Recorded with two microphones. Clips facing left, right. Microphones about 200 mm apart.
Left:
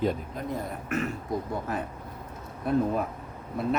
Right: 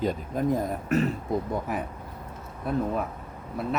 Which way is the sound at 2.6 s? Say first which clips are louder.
Left 3 dB; centre (ahead or behind).